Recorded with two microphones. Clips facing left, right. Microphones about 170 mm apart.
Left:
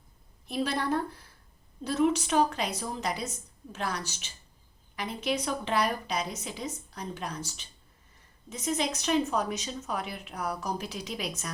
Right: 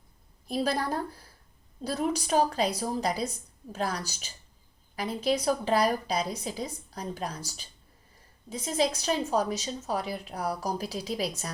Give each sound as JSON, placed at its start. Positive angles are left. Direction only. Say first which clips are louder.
{"t": 0.4, "sound": "speech", "louder": "right 1 dB", "side_deg": -35}